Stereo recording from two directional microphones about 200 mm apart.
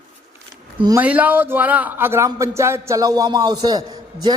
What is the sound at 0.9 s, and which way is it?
Speech, 10° right (ahead or behind).